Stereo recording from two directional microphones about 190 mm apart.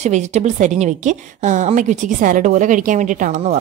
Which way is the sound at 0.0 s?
35° right (ahead or behind).